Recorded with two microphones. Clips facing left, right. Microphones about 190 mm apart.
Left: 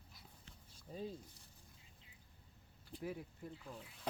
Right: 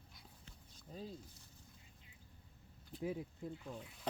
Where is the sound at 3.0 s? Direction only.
20° right (ahead or behind).